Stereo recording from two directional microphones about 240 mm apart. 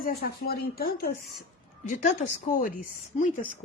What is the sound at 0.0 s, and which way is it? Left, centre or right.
A woman's voice, left.